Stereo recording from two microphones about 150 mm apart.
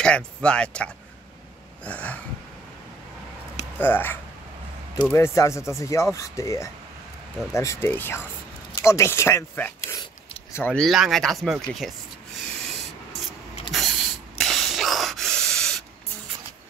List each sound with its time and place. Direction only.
0.0 s speech: 5° left (ahead or behind)
3.7 s speech: 15° left (ahead or behind)
13.7 s spray: centre (ahead or behind)